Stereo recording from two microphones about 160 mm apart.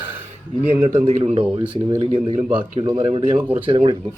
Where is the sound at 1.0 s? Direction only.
35° right (ahead or behind).